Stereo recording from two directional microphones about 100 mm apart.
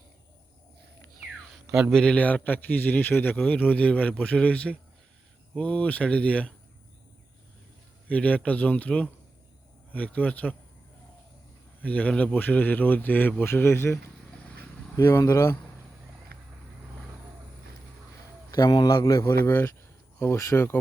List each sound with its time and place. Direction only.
1.5 s a sound: 5° right (ahead or behind)
1.9 s a man's voice: 10° left (ahead or behind)
8.0 s a man's voice: 15° left (ahead or behind)
11.8 s a man's voice: 15° left (ahead or behind)
18.5 s a man's voice: 45° left (ahead or behind)
19.3 s speech: 25° left (ahead or behind)